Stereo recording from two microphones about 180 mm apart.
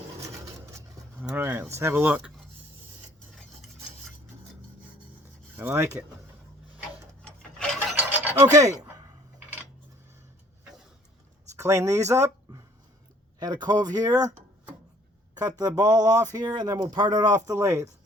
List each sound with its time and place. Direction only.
0.7 s speech: 15° right (ahead or behind)
5.5 s speech: 15° right (ahead or behind)
7.2 s filing: 5° left (ahead or behind)
8.5 s speech: 20° right (ahead or behind)
11.5 s speech: 15° right (ahead or behind)
15.4 s speech: 20° right (ahead or behind)